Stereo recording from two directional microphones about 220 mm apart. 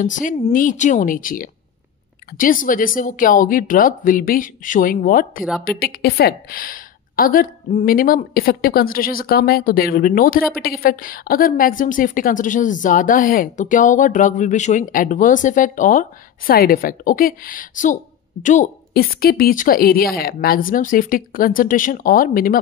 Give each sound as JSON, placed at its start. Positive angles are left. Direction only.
{"t": 0.0, "sound": "a woman's voice", "side_deg": 35}